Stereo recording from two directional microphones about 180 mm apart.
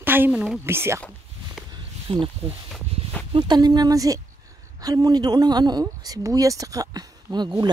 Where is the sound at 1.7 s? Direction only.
30° right (ahead or behind).